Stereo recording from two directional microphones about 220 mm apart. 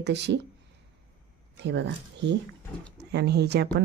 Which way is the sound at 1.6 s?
50° right (ahead or behind).